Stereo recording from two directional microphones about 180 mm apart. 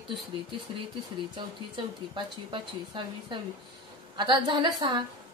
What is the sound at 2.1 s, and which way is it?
Speech, 25° right (ahead or behind).